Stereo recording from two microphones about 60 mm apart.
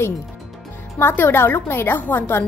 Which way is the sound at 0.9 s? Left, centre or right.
Left.